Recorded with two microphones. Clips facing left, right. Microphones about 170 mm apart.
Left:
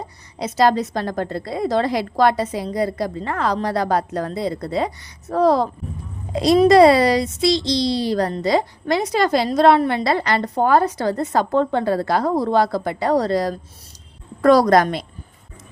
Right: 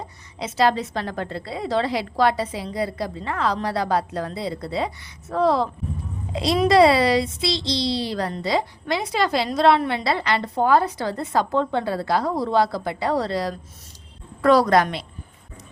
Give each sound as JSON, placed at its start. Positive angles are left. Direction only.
{"t": 0.3, "sound": "a woman's voice", "side_deg": 40}